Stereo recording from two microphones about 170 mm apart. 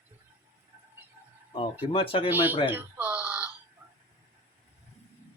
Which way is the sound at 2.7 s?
10° right (ahead or behind).